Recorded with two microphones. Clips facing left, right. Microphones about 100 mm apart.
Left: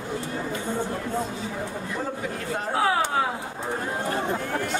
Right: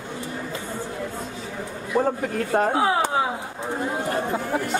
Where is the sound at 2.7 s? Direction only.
25° right (ahead or behind).